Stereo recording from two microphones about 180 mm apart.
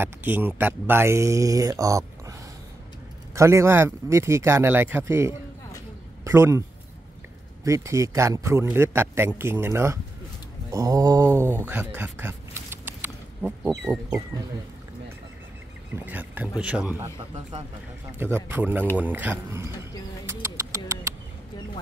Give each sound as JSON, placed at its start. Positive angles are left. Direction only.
{"t": 0.0, "sound": "speech", "side_deg": -10}
{"t": 3.3, "sound": "speech", "side_deg": -15}
{"t": 7.6, "sound": "speech", "side_deg": -15}
{"t": 16.1, "sound": "speech", "side_deg": -10}
{"t": 18.2, "sound": "speech", "side_deg": -10}
{"t": 20.2, "sound": "bird", "side_deg": -15}